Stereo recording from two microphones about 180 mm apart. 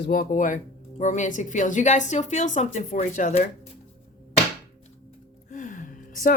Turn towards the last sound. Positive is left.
turn(degrees=45)  # may be behind; listen again after turning